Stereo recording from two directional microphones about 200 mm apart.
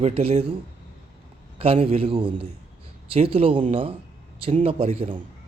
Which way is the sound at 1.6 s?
30° right (ahead or behind).